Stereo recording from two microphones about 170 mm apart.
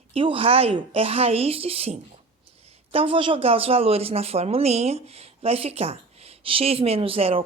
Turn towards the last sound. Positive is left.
turn(degrees=-35)  # may be behind; listen again after turning